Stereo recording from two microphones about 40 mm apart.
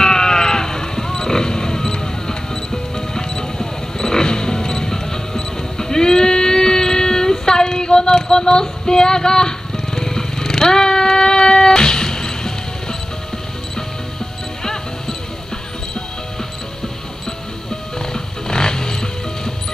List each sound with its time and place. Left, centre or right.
0.0 s sheep: centre
14.6 s music: centre
17.9 s music: centre